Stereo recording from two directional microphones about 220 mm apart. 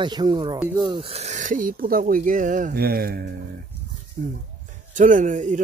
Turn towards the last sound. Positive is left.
turn(degrees=-35)  # may be behind; listen again after turning